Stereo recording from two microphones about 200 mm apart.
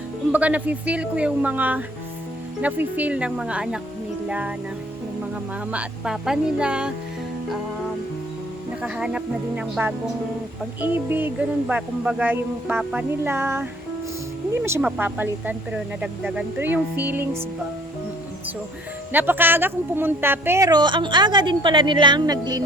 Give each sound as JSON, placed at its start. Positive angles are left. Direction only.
{"t": 0.3, "sound": "music", "side_deg": -5}
{"t": 5.7, "sound": "speech", "side_deg": -5}
{"t": 8.8, "sound": "speech", "side_deg": -5}
{"t": 10.8, "sound": "music", "side_deg": -10}
{"t": 19.1, "sound": "speech", "side_deg": -10}